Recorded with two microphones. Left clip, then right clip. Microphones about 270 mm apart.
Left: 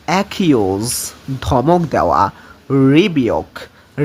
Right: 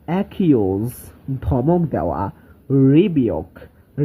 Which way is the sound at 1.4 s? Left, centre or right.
Centre.